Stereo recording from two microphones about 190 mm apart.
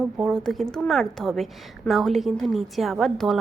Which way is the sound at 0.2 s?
Centre (ahead or behind).